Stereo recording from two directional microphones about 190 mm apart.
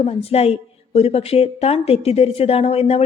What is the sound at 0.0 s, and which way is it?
A woman's voice, 30° left (ahead or behind).